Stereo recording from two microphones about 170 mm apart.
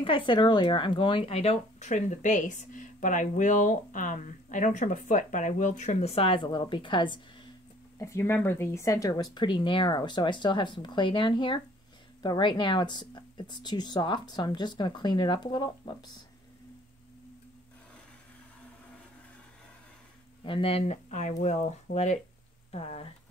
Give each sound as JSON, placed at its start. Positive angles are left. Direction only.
{"t": 0.0, "sound": "speech", "side_deg": 30}
{"t": 8.0, "sound": "speech", "side_deg": 15}
{"t": 20.4, "sound": "speech", "side_deg": 30}